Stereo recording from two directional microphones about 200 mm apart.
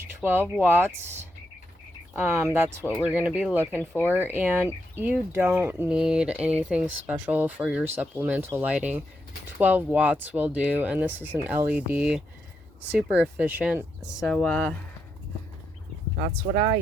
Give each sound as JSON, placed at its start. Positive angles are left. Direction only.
{"t": 0.2, "sound": "speech", "side_deg": -10}
{"t": 2.1, "sound": "speech", "side_deg": -10}
{"t": 16.5, "sound": "speech", "side_deg": -40}